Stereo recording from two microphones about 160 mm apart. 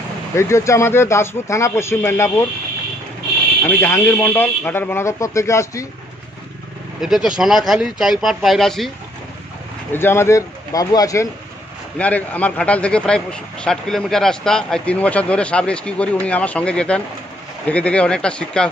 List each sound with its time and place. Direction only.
0.4 s a man's voice: 20° left (ahead or behind)
3.6 s a man's voice: 15° left (ahead or behind)
7.0 s speech: 5° right (ahead or behind)
9.9 s speech: 15° left (ahead or behind)
12.0 s a man's voice: 10° left (ahead or behind)